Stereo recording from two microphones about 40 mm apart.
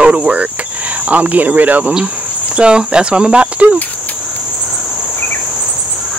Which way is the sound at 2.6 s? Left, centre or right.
Right.